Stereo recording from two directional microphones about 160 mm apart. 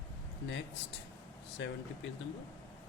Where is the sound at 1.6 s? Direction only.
90° left.